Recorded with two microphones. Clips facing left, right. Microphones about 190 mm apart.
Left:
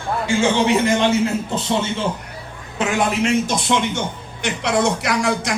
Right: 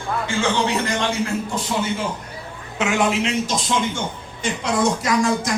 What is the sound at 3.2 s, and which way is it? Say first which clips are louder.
A man's voice: left 4 dB; 60° left (ahead or behind).